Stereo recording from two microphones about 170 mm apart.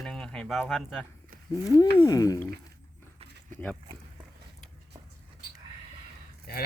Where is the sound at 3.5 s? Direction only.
10° left (ahead or behind).